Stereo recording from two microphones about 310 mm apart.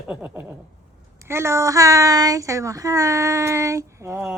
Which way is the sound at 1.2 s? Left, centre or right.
Centre.